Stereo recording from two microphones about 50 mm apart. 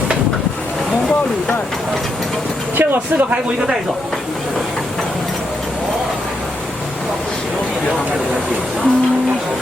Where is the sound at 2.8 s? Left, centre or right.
Right.